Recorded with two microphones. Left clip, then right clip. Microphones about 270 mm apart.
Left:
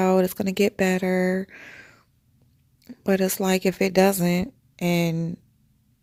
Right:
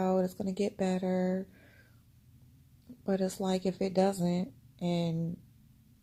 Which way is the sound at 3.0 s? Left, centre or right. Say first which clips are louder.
Left 10 dB; left.